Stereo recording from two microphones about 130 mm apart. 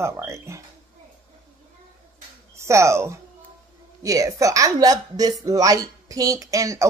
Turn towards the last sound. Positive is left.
turn(degrees=-25)  # may be behind; listen again after turning